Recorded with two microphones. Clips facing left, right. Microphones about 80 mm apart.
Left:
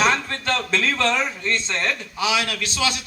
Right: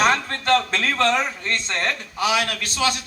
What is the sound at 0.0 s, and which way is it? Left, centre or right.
A man's voice, right.